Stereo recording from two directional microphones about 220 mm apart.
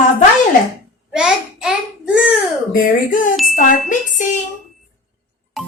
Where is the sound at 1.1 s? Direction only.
5° right (ahead or behind).